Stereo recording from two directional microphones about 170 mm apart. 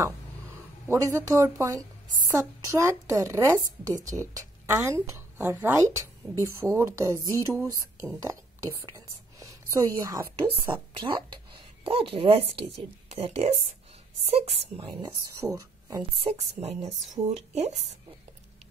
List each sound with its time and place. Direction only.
0.8 s a woman's voice: 20° right (ahead or behind)
8.7 s a sound: 20° right (ahead or behind)
9.9 s a woman's voice: 20° right (ahead or behind)
10.5 s a woman's voice: 30° right (ahead or behind)
16.2 s speech: 35° right (ahead or behind)